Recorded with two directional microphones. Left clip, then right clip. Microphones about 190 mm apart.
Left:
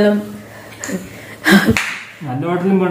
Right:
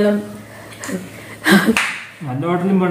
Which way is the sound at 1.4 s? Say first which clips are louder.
Left 1 dB; 5° left (ahead or behind).